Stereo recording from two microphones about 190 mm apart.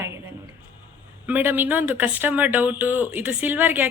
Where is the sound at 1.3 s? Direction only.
10° right (ahead or behind).